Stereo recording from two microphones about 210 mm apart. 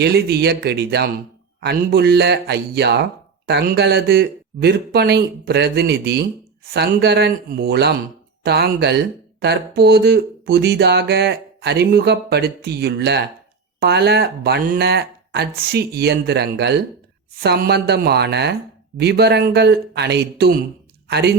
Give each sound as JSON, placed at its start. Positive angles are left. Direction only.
{"t": 0.0, "sound": "speech", "side_deg": -50}